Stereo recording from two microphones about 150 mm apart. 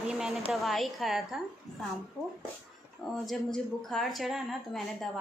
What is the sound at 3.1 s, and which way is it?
A woman's voice, centre (ahead or behind).